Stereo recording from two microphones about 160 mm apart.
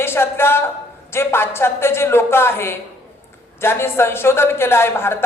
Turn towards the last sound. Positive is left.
turn(degrees=15)  # may be behind; listen again after turning